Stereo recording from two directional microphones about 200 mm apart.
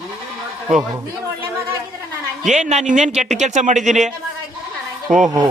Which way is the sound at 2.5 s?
35° right (ahead or behind).